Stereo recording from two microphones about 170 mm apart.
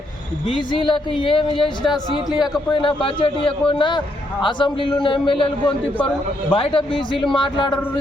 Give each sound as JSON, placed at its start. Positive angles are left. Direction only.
{"t": 0.4, "sound": "a man's voice", "side_deg": 30}